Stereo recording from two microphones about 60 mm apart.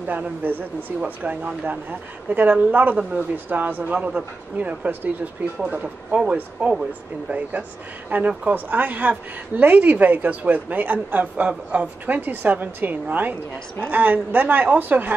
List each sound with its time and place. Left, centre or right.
0.0 s speech: right; by 7.3 s centre
8.1 s a woman's voice: right